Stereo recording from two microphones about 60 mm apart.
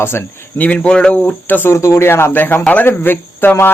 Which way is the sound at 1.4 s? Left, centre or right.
Left.